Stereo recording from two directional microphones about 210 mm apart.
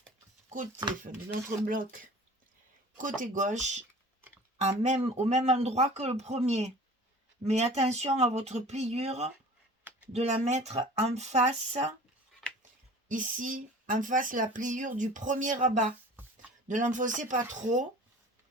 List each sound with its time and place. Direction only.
1.0 s speech: 40° right (ahead or behind)
12.4 s a sound: 5° left (ahead or behind)
13.1 s speech: 40° right (ahead or behind)